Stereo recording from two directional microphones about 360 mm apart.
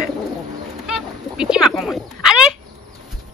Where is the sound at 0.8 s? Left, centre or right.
Centre.